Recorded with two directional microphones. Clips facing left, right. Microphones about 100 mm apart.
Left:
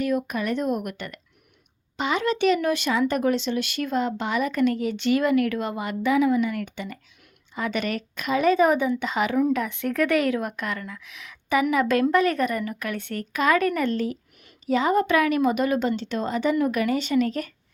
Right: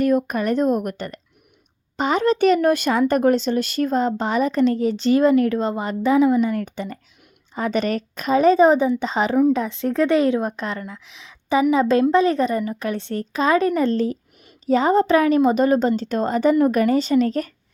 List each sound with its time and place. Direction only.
0.0 s a woman's voice: 45° right (ahead or behind)